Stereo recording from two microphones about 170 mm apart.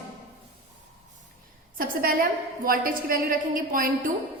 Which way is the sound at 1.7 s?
55° right (ahead or behind).